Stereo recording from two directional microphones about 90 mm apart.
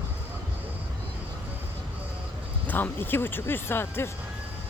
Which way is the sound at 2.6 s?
20° left (ahead or behind).